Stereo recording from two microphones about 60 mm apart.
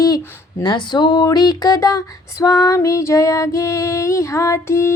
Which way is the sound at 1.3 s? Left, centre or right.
Left.